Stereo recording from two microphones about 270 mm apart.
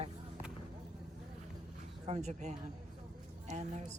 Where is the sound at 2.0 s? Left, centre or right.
Right.